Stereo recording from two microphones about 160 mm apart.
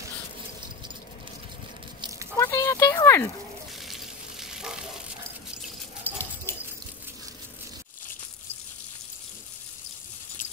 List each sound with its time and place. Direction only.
2.3 s a sound: 15° left (ahead or behind)
3.8 s frying: centre (ahead or behind)
6.0 s dog: 15° left (ahead or behind)